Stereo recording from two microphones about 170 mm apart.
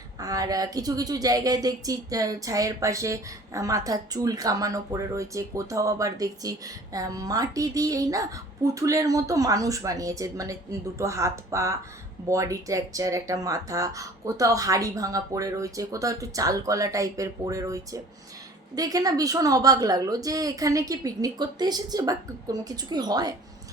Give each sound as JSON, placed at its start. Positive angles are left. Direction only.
{"t": 0.2, "sound": "a woman's voice", "side_deg": -20}